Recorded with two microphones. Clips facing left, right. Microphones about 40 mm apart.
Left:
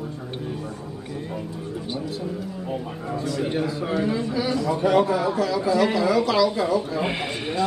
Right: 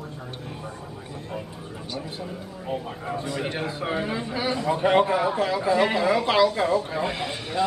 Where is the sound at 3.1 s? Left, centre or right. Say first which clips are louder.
Left 5 dB; right.